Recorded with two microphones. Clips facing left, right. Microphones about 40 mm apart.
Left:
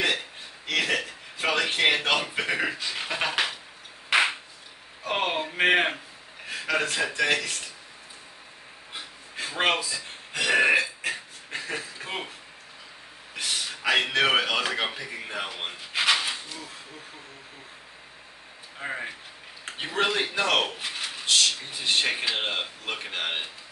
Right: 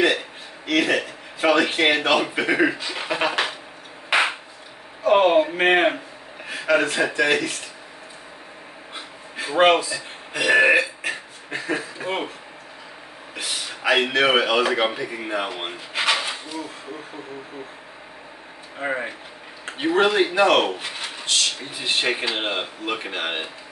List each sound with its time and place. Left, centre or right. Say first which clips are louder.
0.7 s speech: right 6 dB; centre
5.1 s speech: right 11 dB; centre
8.9 s a sound: right 3 dB; centre
9.8 s speech: right 6 dB; right
10.3 s speech: right 5 dB; centre
13.3 s speech: right 1 dB; centre
15.9 s a sound: right 2 dB; centre
18.8 s speech: right 7 dB; centre